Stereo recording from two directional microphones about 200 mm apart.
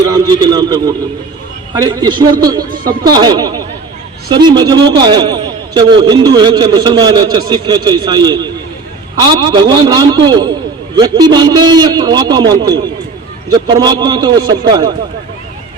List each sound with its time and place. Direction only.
0.1 s a man's voice: 20° right (ahead or behind)